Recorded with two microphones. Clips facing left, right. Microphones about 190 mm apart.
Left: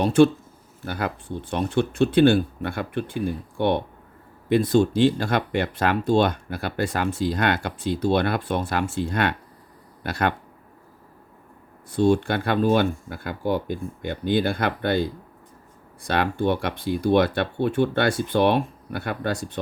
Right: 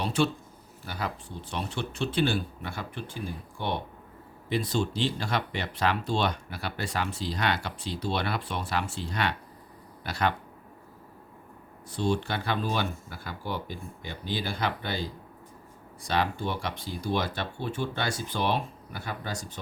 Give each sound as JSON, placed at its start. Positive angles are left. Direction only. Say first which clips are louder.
{"t": 0.0, "sound": "speech", "louder": "left 11 dB", "side_deg": 50}
{"t": 11.9, "sound": "speech", "louder": "left 9 dB", "side_deg": 50}